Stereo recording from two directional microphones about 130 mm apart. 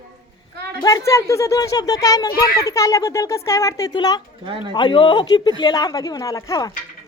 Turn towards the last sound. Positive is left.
turn(degrees=30)  # may be behind; listen again after turning